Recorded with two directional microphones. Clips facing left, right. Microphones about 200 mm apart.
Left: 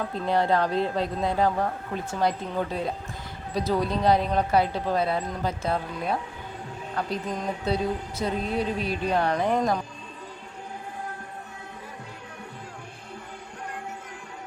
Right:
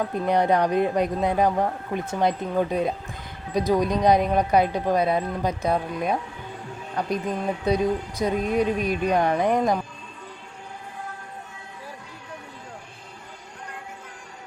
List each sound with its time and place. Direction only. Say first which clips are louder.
0.1 s speech: right 1 dB; 15° right (ahead or behind)